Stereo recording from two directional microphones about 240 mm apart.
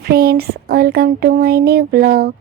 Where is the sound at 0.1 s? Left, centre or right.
Right.